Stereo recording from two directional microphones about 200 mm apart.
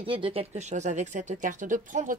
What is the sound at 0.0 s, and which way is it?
Speech, 25° right (ahead or behind).